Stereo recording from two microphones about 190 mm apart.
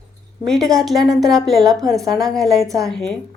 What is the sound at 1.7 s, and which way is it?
Speech, centre (ahead or behind).